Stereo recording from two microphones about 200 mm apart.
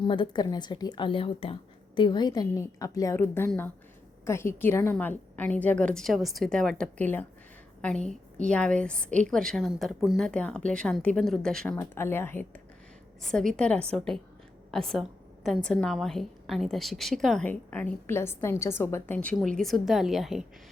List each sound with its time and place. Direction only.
0.0 s a woman's voice: 25° left (ahead or behind); by 20.4 s centre (ahead or behind)